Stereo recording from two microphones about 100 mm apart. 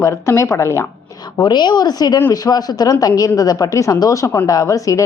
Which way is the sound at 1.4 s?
45° left (ahead or behind).